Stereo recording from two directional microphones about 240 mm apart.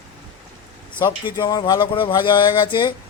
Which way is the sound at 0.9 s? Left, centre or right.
Centre.